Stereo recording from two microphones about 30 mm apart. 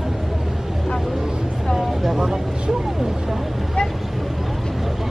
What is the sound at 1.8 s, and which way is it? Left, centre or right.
Vehicle, centre.